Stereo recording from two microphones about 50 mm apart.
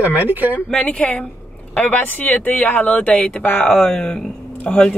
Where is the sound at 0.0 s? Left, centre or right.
Right.